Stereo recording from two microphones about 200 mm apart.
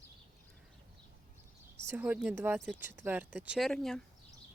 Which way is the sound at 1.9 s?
10° right (ahead or behind).